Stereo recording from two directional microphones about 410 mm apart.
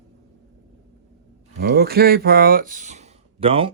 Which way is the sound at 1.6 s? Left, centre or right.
Right.